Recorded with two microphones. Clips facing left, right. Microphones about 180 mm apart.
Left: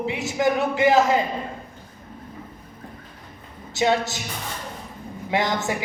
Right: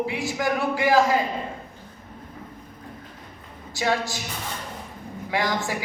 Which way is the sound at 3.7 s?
20° left (ahead or behind).